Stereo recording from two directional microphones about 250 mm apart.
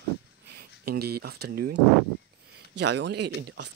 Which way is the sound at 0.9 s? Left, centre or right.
Right.